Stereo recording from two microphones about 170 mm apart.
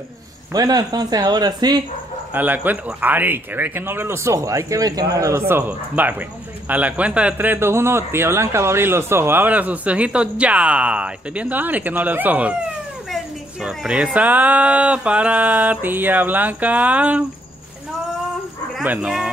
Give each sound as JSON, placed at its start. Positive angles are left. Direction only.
{"t": 0.5, "sound": "speech", "side_deg": -20}
{"t": 2.3, "sound": "a man's voice", "side_deg": -10}
{"t": 18.8, "sound": "speech", "side_deg": -5}